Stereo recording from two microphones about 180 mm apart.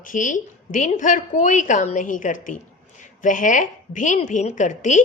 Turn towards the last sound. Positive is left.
turn(degrees=45)  # may be behind; listen again after turning